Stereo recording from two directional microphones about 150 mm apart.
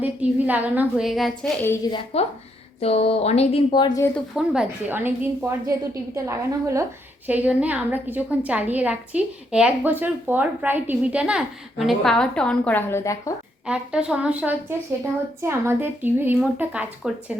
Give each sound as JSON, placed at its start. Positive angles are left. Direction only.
{"t": 0.0, "sound": "a woman's voice", "side_deg": -10}
{"t": 1.9, "sound": "speech", "side_deg": 30}
{"t": 2.8, "sound": "speech", "side_deg": 40}
{"t": 4.4, "sound": "a woman's voice", "side_deg": -10}
{"t": 13.7, "sound": "a woman's voice", "side_deg": -5}